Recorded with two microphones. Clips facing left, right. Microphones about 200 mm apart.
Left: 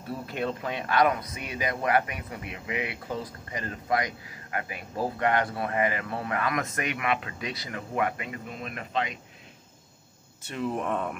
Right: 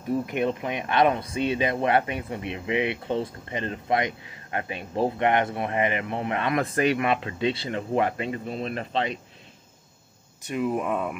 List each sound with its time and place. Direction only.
0.0 s speech: 20° right (ahead or behind)
10.4 s speech: 10° right (ahead or behind)